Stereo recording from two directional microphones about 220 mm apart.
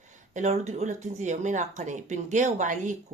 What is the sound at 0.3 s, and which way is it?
Speech, 30° right (ahead or behind).